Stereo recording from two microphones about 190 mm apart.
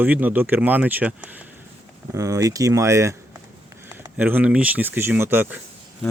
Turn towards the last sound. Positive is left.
turn(degrees=-10)  # may be behind; listen again after turning